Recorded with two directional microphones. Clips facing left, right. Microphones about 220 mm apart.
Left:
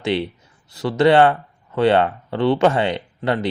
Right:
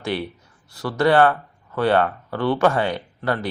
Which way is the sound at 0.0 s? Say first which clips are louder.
Left 4 dB; 25° left (ahead or behind).